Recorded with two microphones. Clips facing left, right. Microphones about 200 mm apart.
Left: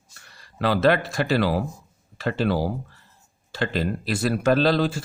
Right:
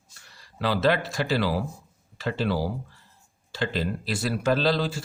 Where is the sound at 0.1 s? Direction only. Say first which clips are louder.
Left 2 dB; 55° left (ahead or behind).